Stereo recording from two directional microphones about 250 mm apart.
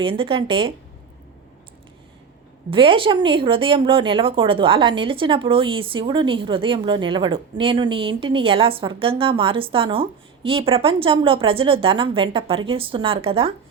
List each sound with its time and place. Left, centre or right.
0.0 s speech: right
2.6 s speech: right